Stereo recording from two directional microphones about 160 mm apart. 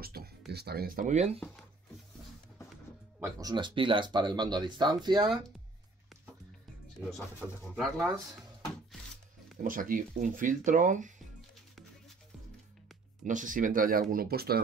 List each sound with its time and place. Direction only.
0.0 s speech: 75° right (ahead or behind)
0.5 s speech: 85° right; by 1.4 s 45° right (ahead or behind)
3.2 s speech: 25° right (ahead or behind)
7.7 s speech: 5° right (ahead or behind)
9.6 s speech: 60° right (ahead or behind)
13.2 s speech: 55° right (ahead or behind); by 14.6 s 75° right (ahead or behind)